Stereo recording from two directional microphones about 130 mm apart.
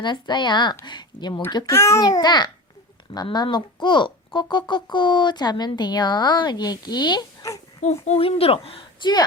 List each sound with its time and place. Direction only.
0.0 s speech: 35° left (ahead or behind)
7.8 s a woman's voice: 55° left (ahead or behind); by 9.2 s 35° left (ahead or behind)